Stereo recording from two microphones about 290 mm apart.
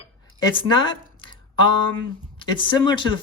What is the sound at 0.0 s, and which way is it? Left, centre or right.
Dishes, centre.